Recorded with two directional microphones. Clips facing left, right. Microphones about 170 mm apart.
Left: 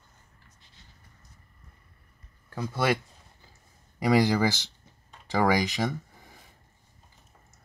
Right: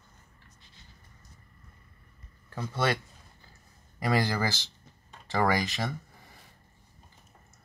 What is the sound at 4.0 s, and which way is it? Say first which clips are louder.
Speech: left 5 dB; 15° left (ahead or behind).